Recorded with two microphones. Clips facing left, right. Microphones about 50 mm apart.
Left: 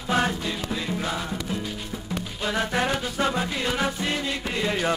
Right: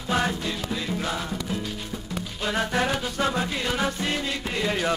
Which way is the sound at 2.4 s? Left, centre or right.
Centre.